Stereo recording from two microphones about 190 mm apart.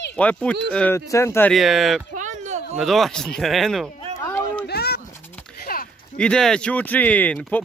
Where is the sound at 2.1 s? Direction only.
40° right (ahead or behind).